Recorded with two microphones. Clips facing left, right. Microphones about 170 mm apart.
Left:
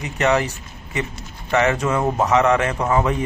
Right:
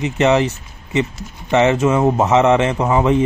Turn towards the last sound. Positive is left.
turn(degrees=-20)  # may be behind; listen again after turning